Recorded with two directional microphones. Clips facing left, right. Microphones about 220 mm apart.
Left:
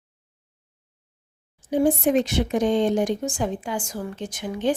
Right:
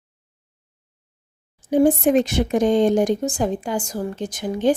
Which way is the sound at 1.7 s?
50° right (ahead or behind).